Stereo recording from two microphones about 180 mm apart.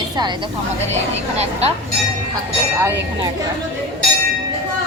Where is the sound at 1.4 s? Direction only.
35° right (ahead or behind).